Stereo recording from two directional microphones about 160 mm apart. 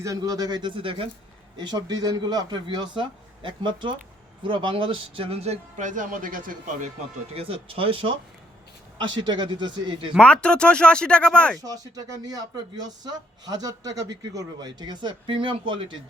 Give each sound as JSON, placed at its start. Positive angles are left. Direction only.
{"t": 0.0, "sound": "a man's voice", "side_deg": -20}
{"t": 7.3, "sound": "a man's voice", "side_deg": -35}
{"t": 10.2, "sound": "speech", "side_deg": 5}
{"t": 11.6, "sound": "a man's voice", "side_deg": -25}